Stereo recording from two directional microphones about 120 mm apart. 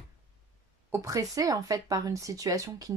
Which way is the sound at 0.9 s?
25° right (ahead or behind).